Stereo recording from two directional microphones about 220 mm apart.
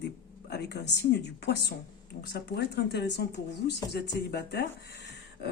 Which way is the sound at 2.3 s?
50° left (ahead or behind).